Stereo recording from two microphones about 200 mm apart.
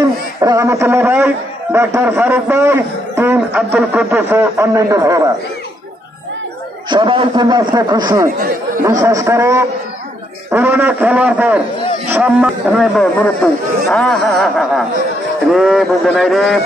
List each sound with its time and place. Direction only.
0.0 s a man's voice: 15° right (ahead or behind)
6.9 s a man's voice: 25° right (ahead or behind); by 16.6 s centre (ahead or behind)